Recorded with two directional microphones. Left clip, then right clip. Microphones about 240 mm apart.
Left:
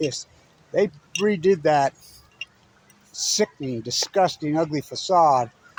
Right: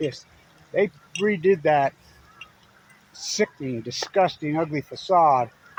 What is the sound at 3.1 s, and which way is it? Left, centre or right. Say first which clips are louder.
Speech: left 2 dB; centre.